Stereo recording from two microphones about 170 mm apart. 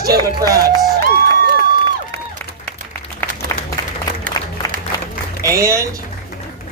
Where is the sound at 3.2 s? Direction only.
10° left (ahead or behind).